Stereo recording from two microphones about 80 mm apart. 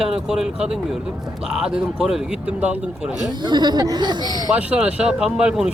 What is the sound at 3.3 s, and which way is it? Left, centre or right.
Speech, right.